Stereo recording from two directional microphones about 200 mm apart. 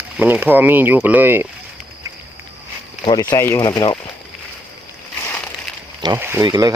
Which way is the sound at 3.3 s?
15° left (ahead or behind).